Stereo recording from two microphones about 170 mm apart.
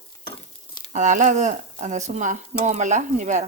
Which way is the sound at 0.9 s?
45° right (ahead or behind).